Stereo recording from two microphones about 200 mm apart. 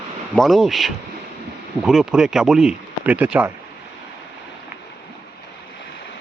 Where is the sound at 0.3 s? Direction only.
Centre (ahead or behind).